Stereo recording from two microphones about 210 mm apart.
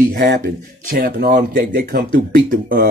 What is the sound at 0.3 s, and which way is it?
Speech, 50° right (ahead or behind).